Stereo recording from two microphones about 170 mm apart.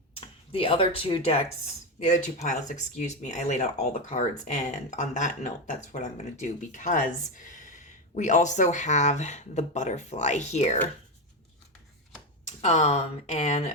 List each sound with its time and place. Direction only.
0.5 s speech: 35° left (ahead or behind)
2.0 s speech: 45° left (ahead or behind)
8.1 s speech: 45° left (ahead or behind)
12.5 s speech: 40° left (ahead or behind)